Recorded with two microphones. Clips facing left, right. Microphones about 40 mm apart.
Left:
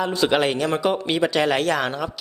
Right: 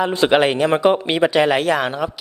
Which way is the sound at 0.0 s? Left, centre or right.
Right.